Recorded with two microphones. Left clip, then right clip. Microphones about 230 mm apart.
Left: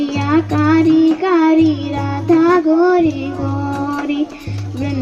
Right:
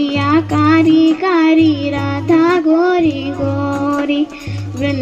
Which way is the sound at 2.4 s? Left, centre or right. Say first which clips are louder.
Left 1 dB; right.